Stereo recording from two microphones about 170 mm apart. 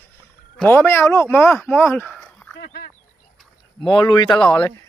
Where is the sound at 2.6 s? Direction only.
65° left (ahead or behind).